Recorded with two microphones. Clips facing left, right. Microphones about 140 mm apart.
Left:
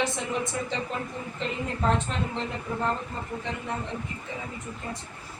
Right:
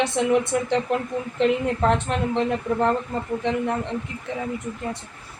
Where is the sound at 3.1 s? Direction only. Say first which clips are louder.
Right 8 dB; 80° right.